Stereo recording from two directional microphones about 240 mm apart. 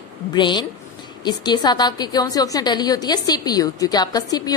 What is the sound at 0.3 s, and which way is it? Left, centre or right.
A woman's voice, centre.